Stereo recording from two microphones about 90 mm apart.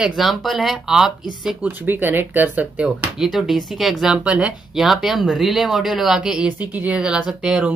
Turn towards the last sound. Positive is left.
turn(degrees=-10)  # may be behind; listen again after turning